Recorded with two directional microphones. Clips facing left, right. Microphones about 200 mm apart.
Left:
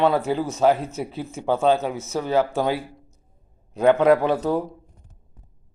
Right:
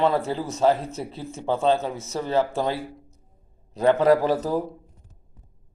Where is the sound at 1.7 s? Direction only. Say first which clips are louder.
Left 2 dB; 65° left (ahead or behind).